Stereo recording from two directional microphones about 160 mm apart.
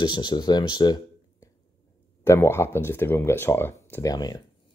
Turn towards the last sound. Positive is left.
turn(degrees=25)  # may be behind; listen again after turning